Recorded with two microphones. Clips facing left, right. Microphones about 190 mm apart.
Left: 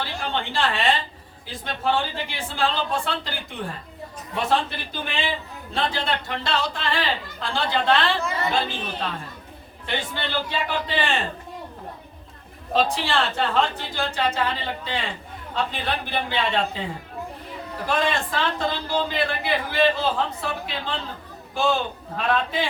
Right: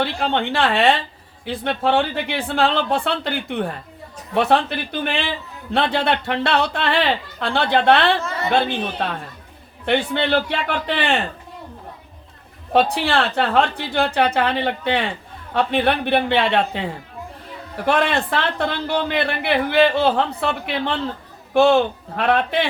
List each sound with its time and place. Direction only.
0.0 s a woman's voice: 65° right (ahead or behind)
12.7 s a woman's voice: 65° right (ahead or behind)
17.8 s a man's voice: 65° right (ahead or behind)